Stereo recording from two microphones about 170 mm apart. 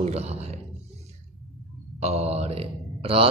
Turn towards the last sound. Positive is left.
turn(degrees=-35)  # may be behind; listen again after turning